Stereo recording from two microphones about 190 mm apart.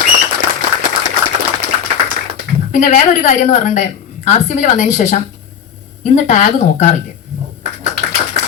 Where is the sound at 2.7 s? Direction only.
40° left (ahead or behind).